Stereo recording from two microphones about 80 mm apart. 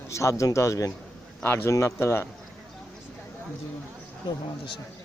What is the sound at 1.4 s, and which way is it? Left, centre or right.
Speech, left.